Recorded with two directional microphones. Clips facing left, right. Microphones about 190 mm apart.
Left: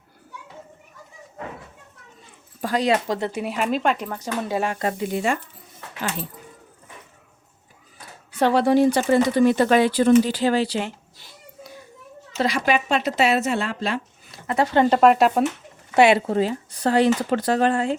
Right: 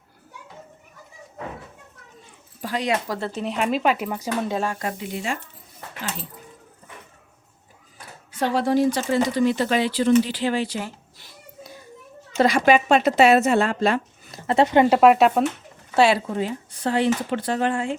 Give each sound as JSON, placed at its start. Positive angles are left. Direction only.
{"t": 2.6, "sound": "dog", "side_deg": 45}
{"t": 2.8, "sound": "speech", "side_deg": 25}
{"t": 4.6, "sound": "speech", "side_deg": 20}
{"t": 4.9, "sound": "speech", "side_deg": 50}
{"t": 8.4, "sound": "speech", "side_deg": 65}
{"t": 12.4, "sound": "speech", "side_deg": -50}
{"t": 14.4, "sound": "speech", "side_deg": -25}
{"t": 16.0, "sound": "speech", "side_deg": 20}
{"t": 16.2, "sound": "speech", "side_deg": 35}